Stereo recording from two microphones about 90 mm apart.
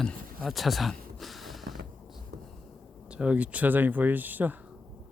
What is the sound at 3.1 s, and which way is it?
Speech, 10° right (ahead or behind).